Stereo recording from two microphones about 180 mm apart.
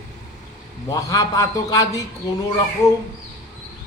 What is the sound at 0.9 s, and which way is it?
A man's voice, 20° left (ahead or behind).